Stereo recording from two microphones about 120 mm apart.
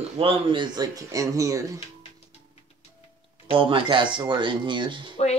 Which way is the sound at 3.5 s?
45° right (ahead or behind).